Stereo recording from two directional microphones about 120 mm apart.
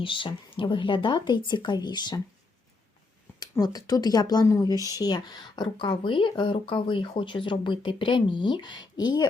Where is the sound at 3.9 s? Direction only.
30° left (ahead or behind).